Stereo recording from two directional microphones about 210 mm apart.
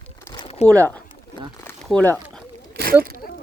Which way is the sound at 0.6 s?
30° left (ahead or behind).